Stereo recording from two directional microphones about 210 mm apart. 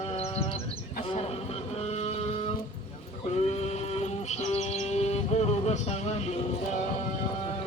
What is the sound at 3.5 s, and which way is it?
Music, 30° left (ahead or behind).